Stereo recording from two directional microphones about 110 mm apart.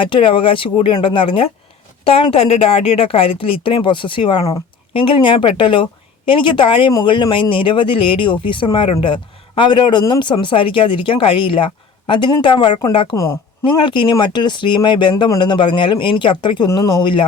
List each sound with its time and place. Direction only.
0.0 s speech: 50° left (ahead or behind)
13.1 s a woman's voice: 30° left (ahead or behind)
13.7 s speech: 45° left (ahead or behind)
16.6 s speech: 30° left (ahead or behind)